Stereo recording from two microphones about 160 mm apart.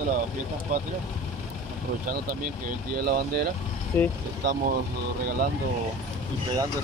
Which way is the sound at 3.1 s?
80° right.